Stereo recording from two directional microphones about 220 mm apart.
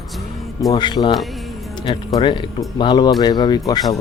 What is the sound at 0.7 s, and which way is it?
Speech, 20° left (ahead or behind).